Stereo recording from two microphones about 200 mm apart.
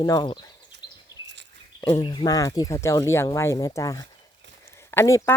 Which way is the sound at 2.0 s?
20° left (ahead or behind).